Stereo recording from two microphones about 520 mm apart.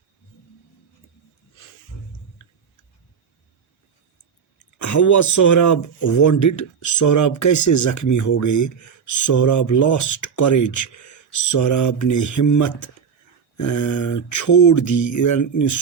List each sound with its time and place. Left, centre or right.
4.8 s speech: left